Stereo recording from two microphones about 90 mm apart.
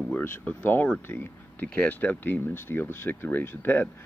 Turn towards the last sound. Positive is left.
turn(degrees=25)  # may be behind; listen again after turning